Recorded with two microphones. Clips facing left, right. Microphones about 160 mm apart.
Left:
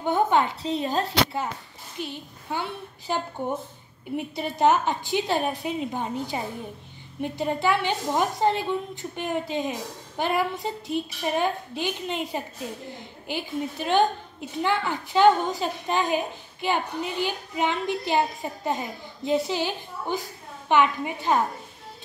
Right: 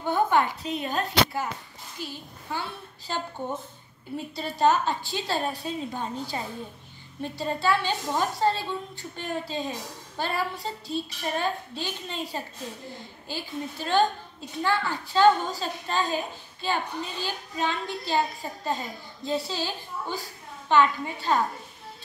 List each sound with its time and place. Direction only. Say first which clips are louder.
0.0 s a child's voice: left 1 dB; 20° left (ahead or behind)